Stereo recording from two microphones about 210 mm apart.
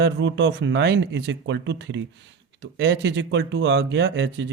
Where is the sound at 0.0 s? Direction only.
60° right (ahead or behind).